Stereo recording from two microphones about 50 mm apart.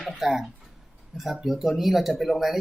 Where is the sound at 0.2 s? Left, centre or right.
Centre.